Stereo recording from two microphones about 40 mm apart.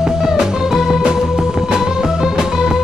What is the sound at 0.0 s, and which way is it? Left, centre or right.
Music, centre.